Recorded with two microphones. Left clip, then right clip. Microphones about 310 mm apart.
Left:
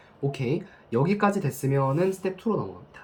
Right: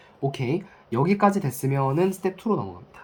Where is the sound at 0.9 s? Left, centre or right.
Right.